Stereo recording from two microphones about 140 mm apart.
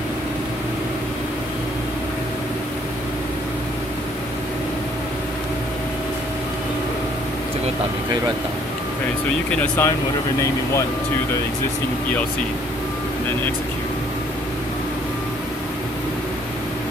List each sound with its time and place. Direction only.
9.6 s speech: 15° left (ahead or behind)